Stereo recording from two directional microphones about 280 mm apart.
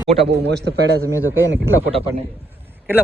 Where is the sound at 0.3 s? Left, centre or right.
Right.